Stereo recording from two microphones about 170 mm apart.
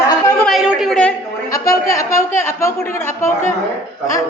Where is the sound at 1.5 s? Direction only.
20° left (ahead or behind).